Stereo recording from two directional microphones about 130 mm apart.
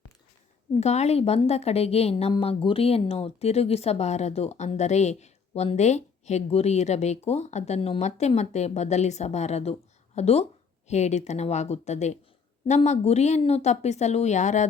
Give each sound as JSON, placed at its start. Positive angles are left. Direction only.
{"t": 0.8, "sound": "a woman's voice", "side_deg": 55}